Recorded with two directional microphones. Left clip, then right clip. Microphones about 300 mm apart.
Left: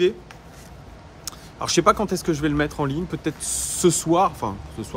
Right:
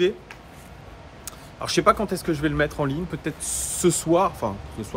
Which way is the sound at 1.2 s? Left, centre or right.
Centre.